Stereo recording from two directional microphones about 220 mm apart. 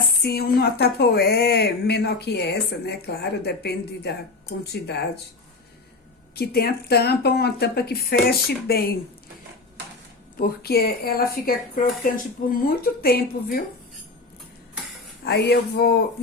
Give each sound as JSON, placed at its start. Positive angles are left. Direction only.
{"t": 0.2, "sound": "speech", "side_deg": 45}
{"t": 6.3, "sound": "speech", "side_deg": 45}
{"t": 10.3, "sound": "speech", "side_deg": 45}
{"t": 15.2, "sound": "speech", "side_deg": 50}